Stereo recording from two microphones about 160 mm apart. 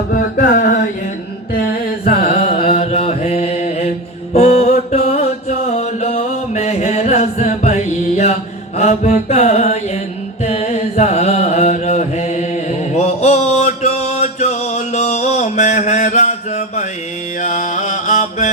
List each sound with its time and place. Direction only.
0.1 s mantra: 60° left (ahead or behind)
1.5 s carnatic music: 60° left (ahead or behind)
2.5 s mantra: 35° left (ahead or behind)
10.4 s carnatic music: 45° left (ahead or behind)
12.9 s mantra: 45° left (ahead or behind)
17.4 s music: 50° left (ahead or behind)